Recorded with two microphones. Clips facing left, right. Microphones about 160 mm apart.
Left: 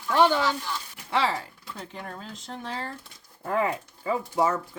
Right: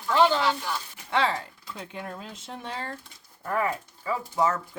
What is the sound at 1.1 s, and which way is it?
Speech, 5° left (ahead or behind).